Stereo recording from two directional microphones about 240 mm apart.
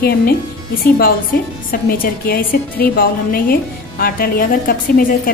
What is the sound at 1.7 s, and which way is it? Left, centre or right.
A woman's voice, left.